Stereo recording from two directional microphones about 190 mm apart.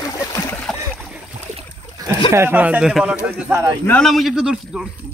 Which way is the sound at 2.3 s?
10° right (ahead or behind).